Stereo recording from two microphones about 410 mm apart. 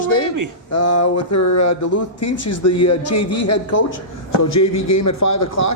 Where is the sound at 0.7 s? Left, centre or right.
Left.